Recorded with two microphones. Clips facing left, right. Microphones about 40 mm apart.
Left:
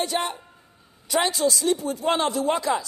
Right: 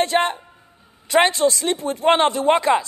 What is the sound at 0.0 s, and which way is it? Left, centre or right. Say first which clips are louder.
A man's voice: right 7 dB; right.